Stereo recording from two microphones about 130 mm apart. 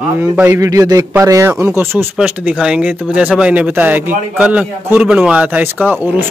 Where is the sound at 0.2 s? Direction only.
20° right (ahead or behind).